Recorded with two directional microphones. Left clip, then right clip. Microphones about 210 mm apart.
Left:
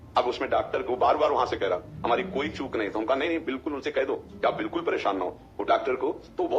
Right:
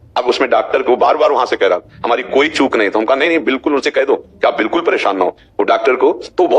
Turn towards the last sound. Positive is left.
turn(degrees=-40)  # may be behind; listen again after turning